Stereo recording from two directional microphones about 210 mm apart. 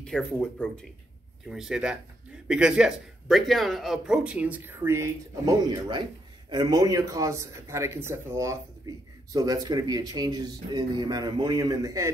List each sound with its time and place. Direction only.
0.0 s a man's voice: 5° left (ahead or behind); by 12.1 s 15° right (ahead or behind)